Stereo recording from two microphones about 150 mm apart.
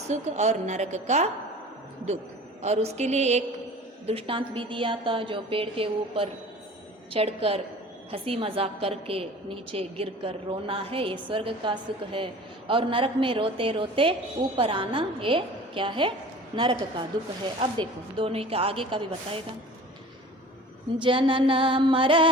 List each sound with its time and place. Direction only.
0.1 s a woman's voice: 50° right (ahead or behind)
2.6 s a woman's voice: 45° right (ahead or behind)
4.0 s a woman's voice: 40° right (ahead or behind)
21.0 s a woman's voice: 35° right (ahead or behind)